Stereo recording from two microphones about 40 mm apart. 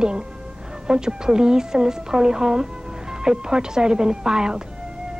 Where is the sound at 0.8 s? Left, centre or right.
Centre.